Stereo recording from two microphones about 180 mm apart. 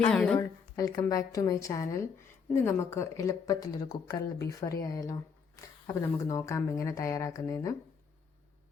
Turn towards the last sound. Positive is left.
turn(degrees=20)  # may be behind; listen again after turning